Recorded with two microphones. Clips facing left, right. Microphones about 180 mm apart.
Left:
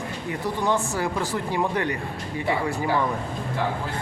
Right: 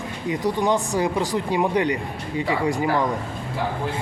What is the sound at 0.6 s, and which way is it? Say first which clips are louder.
Speech: right 2 dB; 15° right (ahead or behind).